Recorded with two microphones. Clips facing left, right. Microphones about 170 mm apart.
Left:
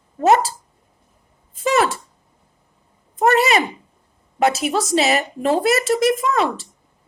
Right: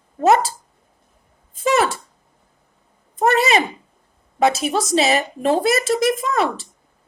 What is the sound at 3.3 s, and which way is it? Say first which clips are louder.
A woman's voice: left 1 dB; 20° right (ahead or behind).